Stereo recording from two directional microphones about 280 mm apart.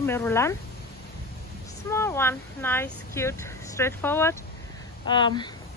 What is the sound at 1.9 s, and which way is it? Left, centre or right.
Speech, centre.